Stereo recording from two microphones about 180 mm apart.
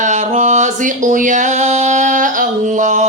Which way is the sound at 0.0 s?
40° right (ahead or behind).